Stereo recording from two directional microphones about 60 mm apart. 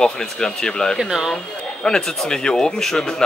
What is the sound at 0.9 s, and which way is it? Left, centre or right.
Speech, centre.